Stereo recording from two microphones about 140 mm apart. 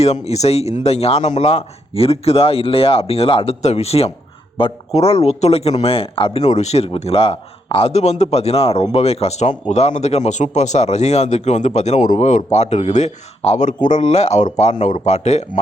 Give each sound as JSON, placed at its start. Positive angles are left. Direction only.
{"t": 0.0, "sound": "speech", "side_deg": 50}